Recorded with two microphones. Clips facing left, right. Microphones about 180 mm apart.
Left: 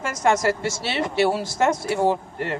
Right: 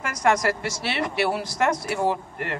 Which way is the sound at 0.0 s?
25° left (ahead or behind).